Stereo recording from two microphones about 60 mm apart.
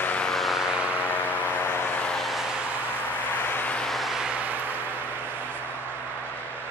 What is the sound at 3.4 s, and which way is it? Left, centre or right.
Vehicle, left.